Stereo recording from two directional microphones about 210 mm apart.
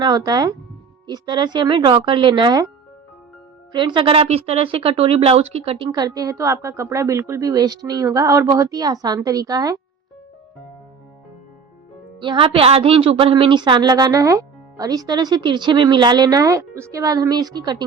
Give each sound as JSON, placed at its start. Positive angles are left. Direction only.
{"t": 0.0, "sound": "a woman's voice", "side_deg": -20}
{"t": 3.7, "sound": "speech", "side_deg": -20}
{"t": 12.2, "sound": "a woman's voice", "side_deg": -25}